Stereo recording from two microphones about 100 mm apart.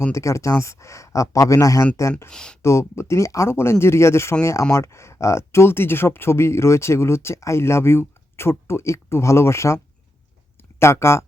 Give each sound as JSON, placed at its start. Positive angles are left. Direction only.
{"t": 0.1, "sound": "speech", "side_deg": 30}
{"t": 2.3, "sound": "speech", "side_deg": 10}
{"t": 2.6, "sound": "speech", "side_deg": 30}